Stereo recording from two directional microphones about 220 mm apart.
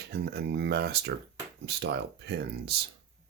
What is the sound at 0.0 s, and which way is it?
Speech, 50° right (ahead or behind).